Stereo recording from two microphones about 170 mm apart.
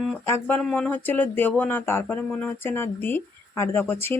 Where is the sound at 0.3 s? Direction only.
15° left (ahead or behind).